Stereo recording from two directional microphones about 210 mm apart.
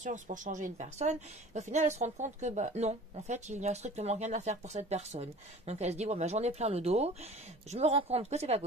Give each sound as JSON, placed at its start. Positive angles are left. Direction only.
{"t": 0.0, "sound": "a woman's voice", "side_deg": -35}